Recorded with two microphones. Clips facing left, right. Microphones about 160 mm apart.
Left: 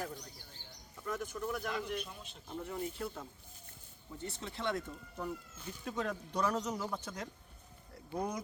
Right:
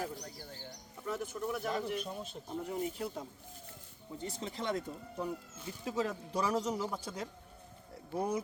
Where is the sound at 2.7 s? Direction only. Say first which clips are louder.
Right 2 dB; 15° right (ahead or behind).